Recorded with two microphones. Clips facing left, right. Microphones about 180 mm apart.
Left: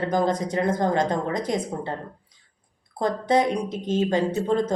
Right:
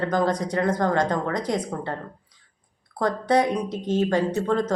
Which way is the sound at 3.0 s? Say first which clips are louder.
Even; 25° left (ahead or behind).